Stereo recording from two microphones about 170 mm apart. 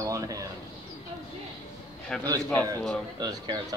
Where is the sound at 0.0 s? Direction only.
20° right (ahead or behind).